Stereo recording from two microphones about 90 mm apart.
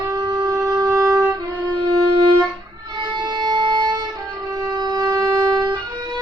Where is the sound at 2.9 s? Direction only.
50° right (ahead or behind).